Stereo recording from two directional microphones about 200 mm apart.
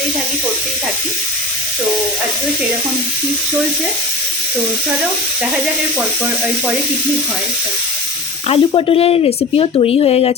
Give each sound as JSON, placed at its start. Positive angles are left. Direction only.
{"t": 8.4, "sound": "speech", "side_deg": 30}